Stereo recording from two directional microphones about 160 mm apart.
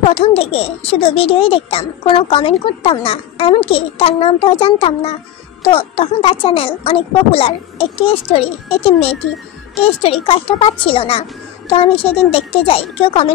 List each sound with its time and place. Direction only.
0.0 s a child's voice: 40° left (ahead or behind)